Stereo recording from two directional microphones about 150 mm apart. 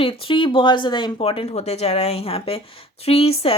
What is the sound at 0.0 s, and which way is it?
A woman's voice, 35° left (ahead or behind).